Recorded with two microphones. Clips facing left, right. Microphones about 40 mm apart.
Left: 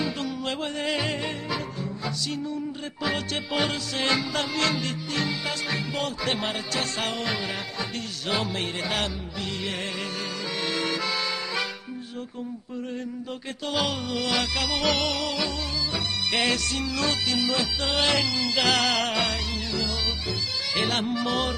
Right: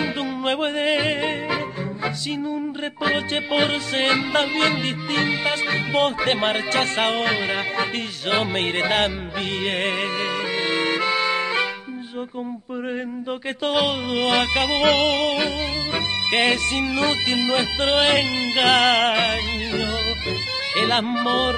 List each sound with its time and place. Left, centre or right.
0.0 s music: right
3.0 s music: right
5.1 s music: right
10.6 s accordion: right
13.7 s music: right